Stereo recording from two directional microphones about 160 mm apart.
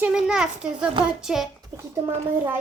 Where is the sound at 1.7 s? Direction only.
15° right (ahead or behind).